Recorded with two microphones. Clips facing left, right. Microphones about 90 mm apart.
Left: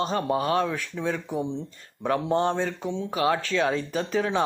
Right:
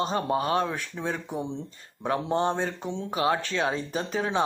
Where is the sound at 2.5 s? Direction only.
30° right (ahead or behind).